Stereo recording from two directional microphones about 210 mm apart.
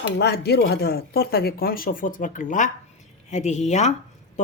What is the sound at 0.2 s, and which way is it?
A woman's voice, 50° left (ahead or behind).